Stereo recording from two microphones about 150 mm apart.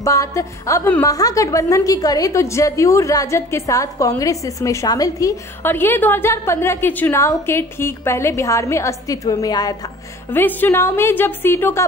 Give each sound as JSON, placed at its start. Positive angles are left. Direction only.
{"t": 0.0, "sound": "a woman's voice", "side_deg": 20}
{"t": 10.3, "sound": "a woman's voice", "side_deg": 15}